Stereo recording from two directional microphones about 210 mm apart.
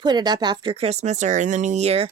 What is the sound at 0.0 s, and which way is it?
Speech, 20° right (ahead or behind).